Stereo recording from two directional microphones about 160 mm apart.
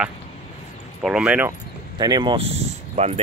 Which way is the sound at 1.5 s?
25° right (ahead or behind).